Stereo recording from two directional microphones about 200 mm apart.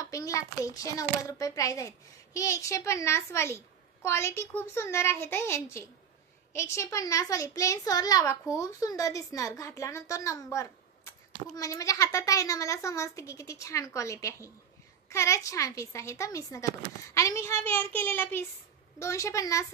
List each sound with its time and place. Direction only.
0.0 s a child's voice: 15° left (ahead or behind)